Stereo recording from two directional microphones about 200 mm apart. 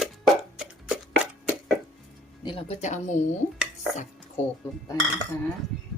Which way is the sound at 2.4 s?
30° left (ahead or behind).